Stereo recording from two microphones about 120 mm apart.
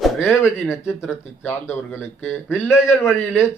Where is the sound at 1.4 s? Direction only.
15° left (ahead or behind).